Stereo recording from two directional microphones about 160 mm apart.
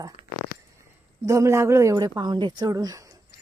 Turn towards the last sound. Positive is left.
turn(degrees=-20)  # may be behind; listen again after turning